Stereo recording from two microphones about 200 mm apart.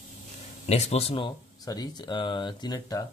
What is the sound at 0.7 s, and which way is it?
Speech, 30° left (ahead or behind).